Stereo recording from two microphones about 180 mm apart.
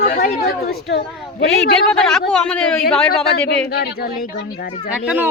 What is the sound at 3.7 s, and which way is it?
Speech, 60° left (ahead or behind).